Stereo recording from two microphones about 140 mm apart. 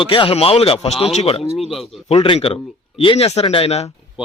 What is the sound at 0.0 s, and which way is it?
Speech, 40° left (ahead or behind).